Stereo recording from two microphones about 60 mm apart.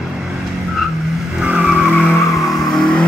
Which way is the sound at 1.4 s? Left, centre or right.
Centre.